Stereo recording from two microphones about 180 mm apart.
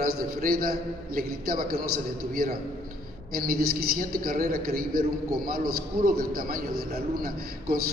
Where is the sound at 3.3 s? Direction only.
55° right (ahead or behind).